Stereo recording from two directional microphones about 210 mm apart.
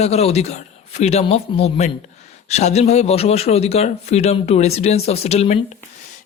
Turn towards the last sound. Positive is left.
turn(degrees=30)  # may be behind; listen again after turning